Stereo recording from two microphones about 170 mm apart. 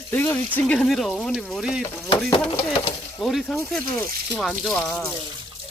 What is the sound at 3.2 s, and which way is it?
Speech, centre (ahead or behind).